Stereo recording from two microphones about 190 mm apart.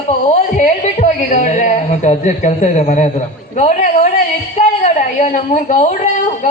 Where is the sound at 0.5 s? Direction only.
40° left (ahead or behind).